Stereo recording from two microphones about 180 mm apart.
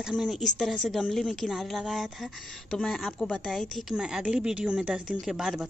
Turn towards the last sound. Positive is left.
turn(degrees=0)  # may be behind; listen again after turning